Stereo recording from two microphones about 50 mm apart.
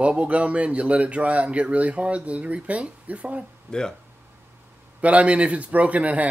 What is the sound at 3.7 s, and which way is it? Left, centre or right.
Speech, centre.